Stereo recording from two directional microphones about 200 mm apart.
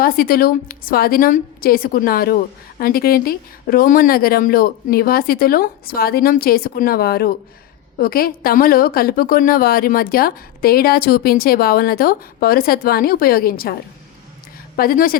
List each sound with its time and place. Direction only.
0.0 s a woman's voice: 45° left (ahead or behind)
14.8 s a woman's voice: 45° left (ahead or behind)